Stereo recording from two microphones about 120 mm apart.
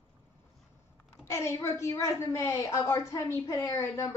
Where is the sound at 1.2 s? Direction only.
25° left (ahead or behind).